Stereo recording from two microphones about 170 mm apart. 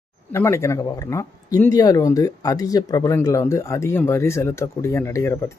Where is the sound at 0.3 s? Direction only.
15° left (ahead or behind).